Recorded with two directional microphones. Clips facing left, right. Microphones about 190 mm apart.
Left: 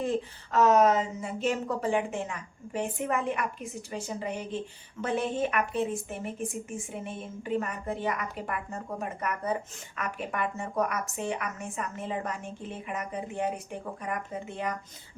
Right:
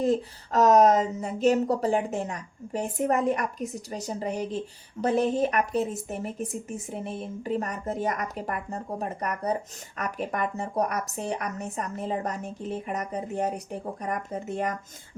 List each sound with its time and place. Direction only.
0.0 s speech: 40° right (ahead or behind)